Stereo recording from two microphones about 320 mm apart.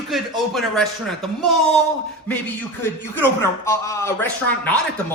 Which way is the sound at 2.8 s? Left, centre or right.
Centre.